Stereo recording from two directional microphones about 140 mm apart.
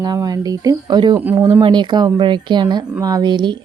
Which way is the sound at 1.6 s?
35° right (ahead or behind).